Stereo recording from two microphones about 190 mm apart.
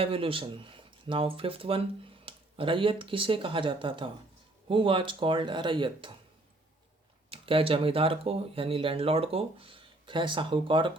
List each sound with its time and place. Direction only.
0.0 s speech: 30° right (ahead or behind)
7.3 s speech: 30° right (ahead or behind)